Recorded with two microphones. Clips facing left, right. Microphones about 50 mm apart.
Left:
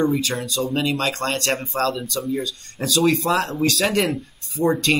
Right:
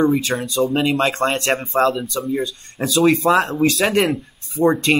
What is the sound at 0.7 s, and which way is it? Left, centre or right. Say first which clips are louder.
Speech: right 3 dB; right.